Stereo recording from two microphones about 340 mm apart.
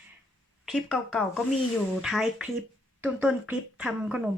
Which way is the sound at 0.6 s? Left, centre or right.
Centre.